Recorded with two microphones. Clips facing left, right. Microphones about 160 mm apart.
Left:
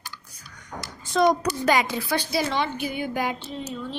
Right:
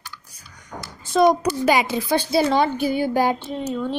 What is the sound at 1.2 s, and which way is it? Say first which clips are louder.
Speech: right 4 dB; 20° right (ahead or behind).